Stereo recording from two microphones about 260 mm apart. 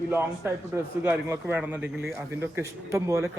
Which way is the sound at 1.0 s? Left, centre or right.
Centre.